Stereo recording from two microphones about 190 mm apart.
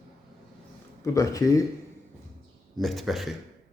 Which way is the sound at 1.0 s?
15° left (ahead or behind).